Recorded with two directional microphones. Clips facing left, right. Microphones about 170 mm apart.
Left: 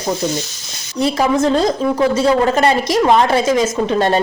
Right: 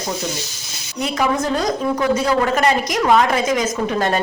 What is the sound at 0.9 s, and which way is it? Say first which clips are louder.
A woman's voice: left 5 dB; 30° left (ahead or behind).